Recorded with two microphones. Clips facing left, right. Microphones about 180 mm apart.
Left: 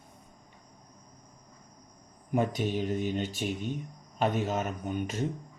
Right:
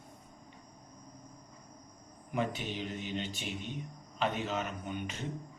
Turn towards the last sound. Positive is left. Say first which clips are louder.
# left 6 dB
turn(degrees=40)  # may be behind; listen again after turning